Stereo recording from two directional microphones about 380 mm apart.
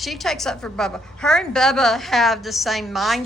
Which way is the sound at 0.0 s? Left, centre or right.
Centre.